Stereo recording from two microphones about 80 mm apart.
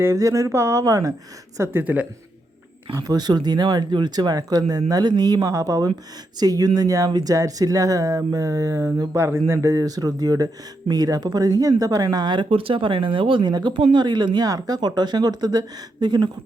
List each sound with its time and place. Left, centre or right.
0.0 s speech: right
1.8 s a woman's voice: centre
3.0 s speech: right
7.1 s speech: right
7.3 s speech: right
9.7 s speech: right